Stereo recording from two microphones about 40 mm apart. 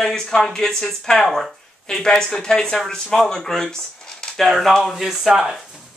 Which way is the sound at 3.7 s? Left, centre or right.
Centre.